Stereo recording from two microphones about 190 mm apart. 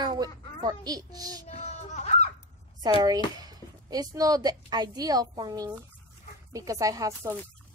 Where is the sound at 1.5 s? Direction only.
35° left (ahead or behind).